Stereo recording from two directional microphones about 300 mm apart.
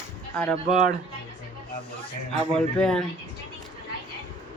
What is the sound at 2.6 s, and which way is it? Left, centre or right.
Speech, centre.